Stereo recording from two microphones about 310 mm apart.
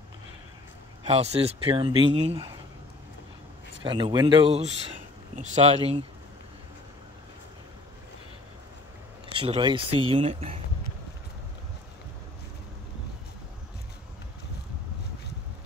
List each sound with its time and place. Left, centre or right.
1.0 s speech: centre
3.8 s speech: centre
9.3 s speech: centre